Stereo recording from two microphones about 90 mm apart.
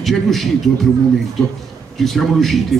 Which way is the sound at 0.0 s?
Centre (ahead or behind).